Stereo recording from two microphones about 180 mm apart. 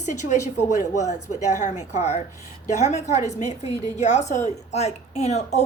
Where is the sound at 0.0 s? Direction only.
40° left (ahead or behind).